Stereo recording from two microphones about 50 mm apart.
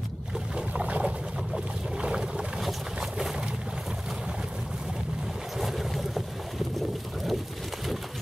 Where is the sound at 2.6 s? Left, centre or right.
Centre.